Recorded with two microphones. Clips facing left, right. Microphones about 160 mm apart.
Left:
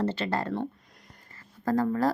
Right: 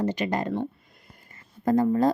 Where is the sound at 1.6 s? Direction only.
20° right (ahead or behind).